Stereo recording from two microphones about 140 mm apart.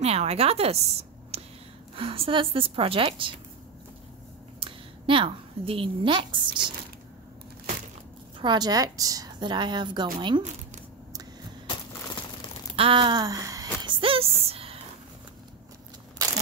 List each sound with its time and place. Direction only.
0.0 s a woman's voice: 50° right (ahead or behind)
4.6 s a woman's voice: 35° right (ahead or behind)
8.4 s a woman's voice: 30° right (ahead or behind)
12.7 s a sound: 40° right (ahead or behind)